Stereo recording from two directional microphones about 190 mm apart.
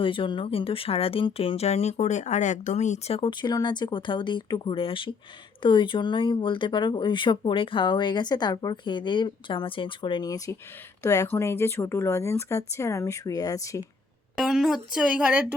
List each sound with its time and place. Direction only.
0.0 s speech: 25° left (ahead or behind)
14.3 s speech: centre (ahead or behind)